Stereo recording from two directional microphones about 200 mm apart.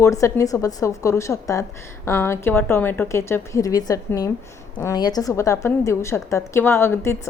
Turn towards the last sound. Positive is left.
turn(degrees=15)  # may be behind; listen again after turning